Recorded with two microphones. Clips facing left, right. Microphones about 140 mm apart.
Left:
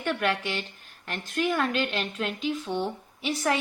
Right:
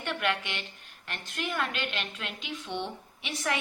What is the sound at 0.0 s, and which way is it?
A woman's voice, 40° left (ahead or behind).